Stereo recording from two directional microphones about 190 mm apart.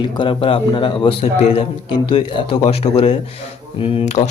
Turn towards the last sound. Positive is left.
turn(degrees=35)  # may be behind; listen again after turning